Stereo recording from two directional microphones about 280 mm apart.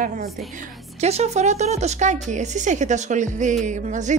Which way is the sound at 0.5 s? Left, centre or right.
Right.